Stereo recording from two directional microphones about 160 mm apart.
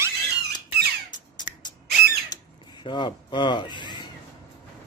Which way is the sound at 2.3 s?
30° left (ahead or behind).